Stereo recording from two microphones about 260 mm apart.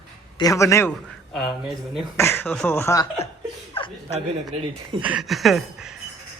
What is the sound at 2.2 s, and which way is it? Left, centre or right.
Speech, centre.